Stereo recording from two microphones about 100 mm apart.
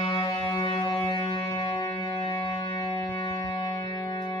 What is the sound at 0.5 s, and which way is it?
Music, 55° left (ahead or behind).